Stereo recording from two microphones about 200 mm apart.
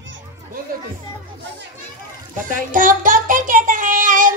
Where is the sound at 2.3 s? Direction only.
40° right (ahead or behind).